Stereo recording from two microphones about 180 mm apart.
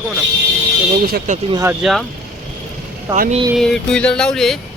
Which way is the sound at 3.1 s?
45° right (ahead or behind).